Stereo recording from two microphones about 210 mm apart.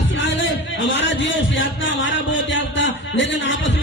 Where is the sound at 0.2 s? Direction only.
60° left (ahead or behind).